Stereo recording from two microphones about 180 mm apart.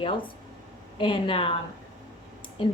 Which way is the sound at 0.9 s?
30° left (ahead or behind).